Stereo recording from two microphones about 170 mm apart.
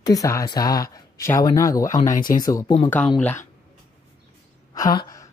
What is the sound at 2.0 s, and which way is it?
Speech, 55° left (ahead or behind).